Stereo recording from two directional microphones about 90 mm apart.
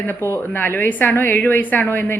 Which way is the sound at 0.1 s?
25° left (ahead or behind).